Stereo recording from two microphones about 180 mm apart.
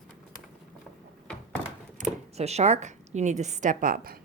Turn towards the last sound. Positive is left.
turn(degrees=-50)  # may be behind; listen again after turning